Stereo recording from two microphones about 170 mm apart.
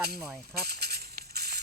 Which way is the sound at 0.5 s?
70° right (ahead or behind).